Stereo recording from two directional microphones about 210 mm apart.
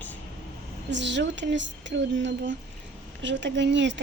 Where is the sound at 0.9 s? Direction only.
55° right (ahead or behind).